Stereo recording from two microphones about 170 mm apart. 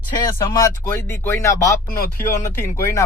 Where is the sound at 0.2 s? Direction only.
20° left (ahead or behind).